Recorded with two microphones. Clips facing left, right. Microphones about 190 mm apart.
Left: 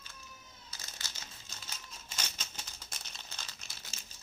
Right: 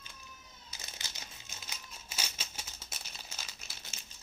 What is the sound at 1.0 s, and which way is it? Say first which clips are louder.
Crumpling: right 1 dB; 20° right (ahead or behind).